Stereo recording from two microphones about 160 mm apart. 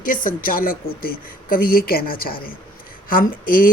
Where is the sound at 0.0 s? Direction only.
55° left (ahead or behind).